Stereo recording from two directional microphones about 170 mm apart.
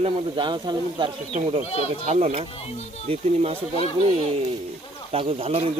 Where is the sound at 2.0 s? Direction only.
40° right (ahead or behind).